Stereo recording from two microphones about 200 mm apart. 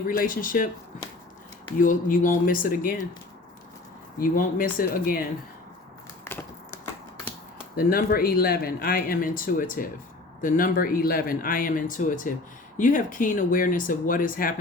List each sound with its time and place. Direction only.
0.1 s speech: 45° left (ahead or behind)
1.8 s speech: 40° left (ahead or behind)
4.2 s speech: 40° left (ahead or behind)
6.2 s a sound: 10° left (ahead or behind)
7.8 s speech: 50° left (ahead or behind)